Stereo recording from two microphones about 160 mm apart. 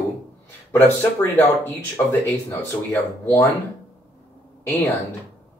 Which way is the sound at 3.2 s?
15° left (ahead or behind).